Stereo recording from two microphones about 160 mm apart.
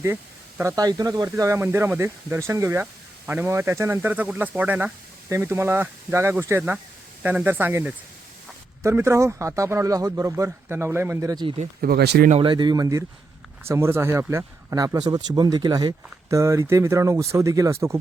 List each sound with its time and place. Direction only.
0.8 s speech: 25° right (ahead or behind)
11.4 s speech: 40° right (ahead or behind)
11.8 s speech: 80° right
12.4 s speech: 30° right (ahead or behind)